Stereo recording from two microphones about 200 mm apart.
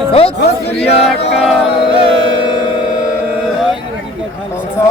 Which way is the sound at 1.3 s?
Centre (ahead or behind).